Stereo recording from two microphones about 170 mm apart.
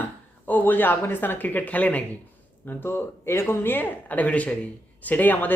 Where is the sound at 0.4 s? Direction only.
10° left (ahead or behind).